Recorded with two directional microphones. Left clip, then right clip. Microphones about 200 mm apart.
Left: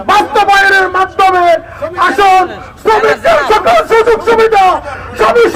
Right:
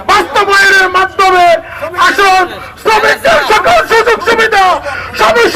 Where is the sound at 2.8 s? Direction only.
35° left (ahead or behind).